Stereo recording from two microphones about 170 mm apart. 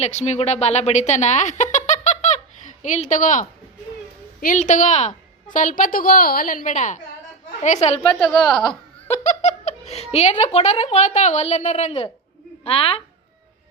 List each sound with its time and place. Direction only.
0.0 s a woman's voice: 40° left (ahead or behind)
8.4 s a woman's voice: centre (ahead or behind)
9.0 s speech: 40° left (ahead or behind)